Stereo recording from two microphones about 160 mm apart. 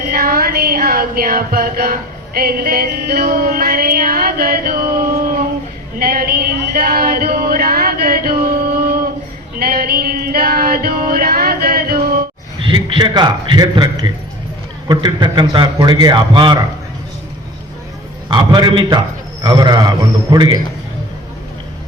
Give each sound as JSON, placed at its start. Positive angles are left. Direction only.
{"t": 0.1, "sound": "a sound", "side_deg": -65}
{"t": 9.6, "sound": "male singing", "side_deg": -70}
{"t": 12.6, "sound": "a man's voice", "side_deg": -30}
{"t": 18.3, "sound": "a man's voice", "side_deg": -30}